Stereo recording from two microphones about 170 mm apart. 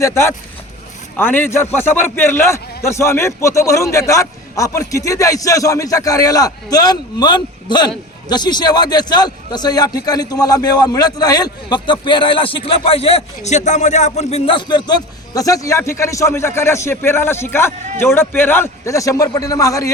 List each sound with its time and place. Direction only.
0.0 s a man's voice: 15° left (ahead or behind)